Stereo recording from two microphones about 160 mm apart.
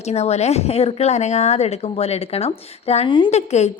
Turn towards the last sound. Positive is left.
turn(degrees=45)  # may be behind; listen again after turning